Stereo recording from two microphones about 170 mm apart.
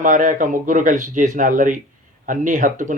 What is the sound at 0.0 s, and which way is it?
Speech, 50° right (ahead or behind).